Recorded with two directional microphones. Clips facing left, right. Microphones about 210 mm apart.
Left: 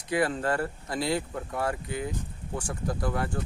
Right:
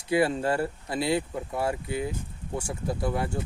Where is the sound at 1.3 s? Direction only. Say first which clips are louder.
Right 2 dB; 10° right (ahead or behind).